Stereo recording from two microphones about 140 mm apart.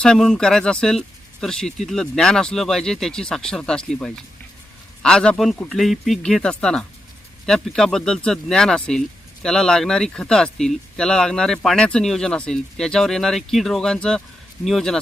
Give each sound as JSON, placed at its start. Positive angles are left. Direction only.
{"t": 0.0, "sound": "speech", "side_deg": 5}